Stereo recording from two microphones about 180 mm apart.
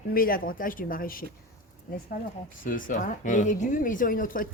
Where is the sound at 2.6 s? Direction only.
50° left (ahead or behind).